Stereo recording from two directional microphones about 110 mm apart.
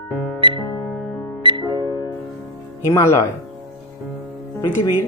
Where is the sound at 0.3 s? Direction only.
50° right (ahead or behind).